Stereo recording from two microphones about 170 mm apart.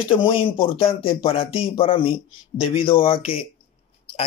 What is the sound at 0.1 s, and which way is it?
Speech, 30° left (ahead or behind).